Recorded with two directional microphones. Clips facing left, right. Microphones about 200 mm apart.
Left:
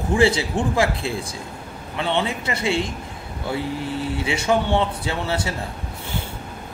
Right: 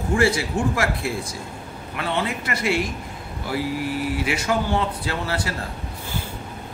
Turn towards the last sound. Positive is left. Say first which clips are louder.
# left 2 dB
turn(degrees=25)  # may be behind; listen again after turning